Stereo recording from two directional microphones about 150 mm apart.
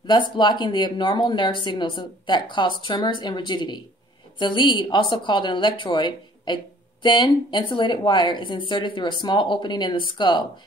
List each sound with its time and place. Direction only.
0.4 s a woman's voice: 30° left (ahead or behind)